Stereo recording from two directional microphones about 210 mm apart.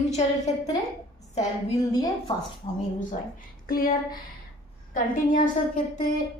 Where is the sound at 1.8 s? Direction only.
15° left (ahead or behind).